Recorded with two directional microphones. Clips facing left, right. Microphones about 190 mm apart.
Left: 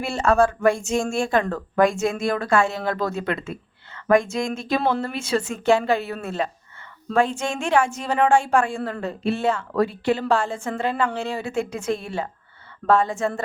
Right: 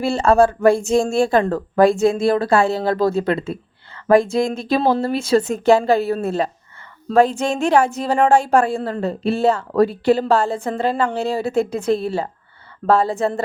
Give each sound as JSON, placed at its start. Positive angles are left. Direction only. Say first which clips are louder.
{"t": 0.0, "sound": "speech", "louder": "right 5 dB", "side_deg": -30}